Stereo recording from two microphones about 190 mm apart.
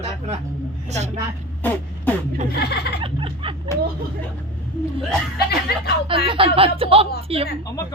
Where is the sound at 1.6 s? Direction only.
10° left (ahead or behind).